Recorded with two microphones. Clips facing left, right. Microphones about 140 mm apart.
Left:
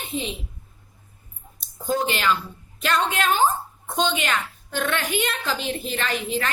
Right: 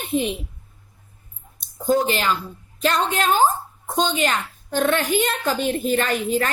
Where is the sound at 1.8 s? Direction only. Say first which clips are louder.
Right 3 dB; 40° right (ahead or behind).